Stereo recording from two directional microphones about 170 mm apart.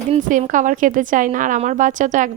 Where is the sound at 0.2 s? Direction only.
50° right (ahead or behind).